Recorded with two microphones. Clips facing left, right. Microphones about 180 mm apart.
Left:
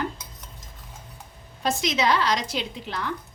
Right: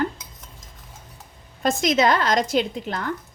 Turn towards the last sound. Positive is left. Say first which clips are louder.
# right 7 dB
turn(degrees=-50)  # may be behind; listen again after turning